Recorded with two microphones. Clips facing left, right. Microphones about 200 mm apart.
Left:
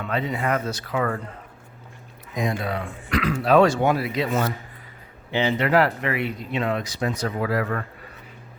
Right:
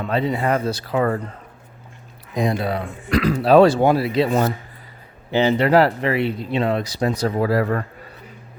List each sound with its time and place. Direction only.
0.0 s speech: 35° right (ahead or behind)
2.3 s speech: 35° right (ahead or behind)